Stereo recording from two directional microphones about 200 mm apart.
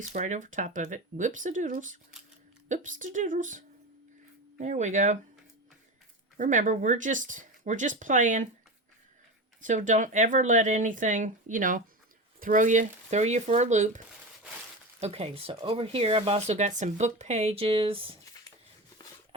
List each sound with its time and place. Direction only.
0.1 s speech: 40° right (ahead or behind)
6.3 s speech: 40° right (ahead or behind)
9.6 s speech: 40° right (ahead or behind)
15.0 s speech: 30° right (ahead or behind)